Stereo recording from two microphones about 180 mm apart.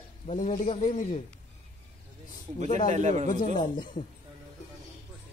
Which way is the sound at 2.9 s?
40° right (ahead or behind).